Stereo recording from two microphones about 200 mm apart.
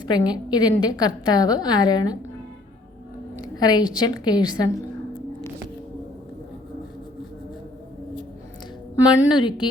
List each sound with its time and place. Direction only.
0.1 s a woman's voice: 20° left (ahead or behind)
3.4 s a woman's voice: 20° left (ahead or behind)
9.3 s a woman's voice: 20° left (ahead or behind)